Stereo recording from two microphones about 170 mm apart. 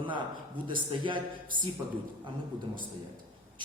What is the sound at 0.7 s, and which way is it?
Speech, 30° right (ahead or behind).